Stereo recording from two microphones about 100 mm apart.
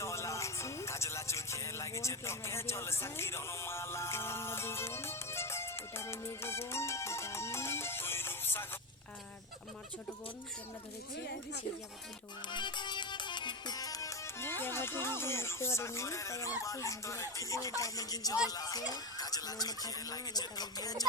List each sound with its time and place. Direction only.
0.0 s music: 30° left (ahead or behind)
12.5 s music: 50° left (ahead or behind)
18.4 s speech: 40° left (ahead or behind)